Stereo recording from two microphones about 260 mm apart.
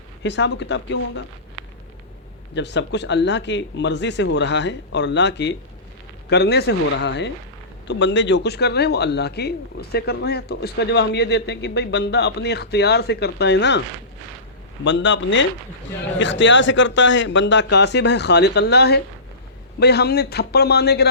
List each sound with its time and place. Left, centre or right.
0.2 s a man's voice: left
2.6 s a man's voice: left
14.8 s a man's voice: left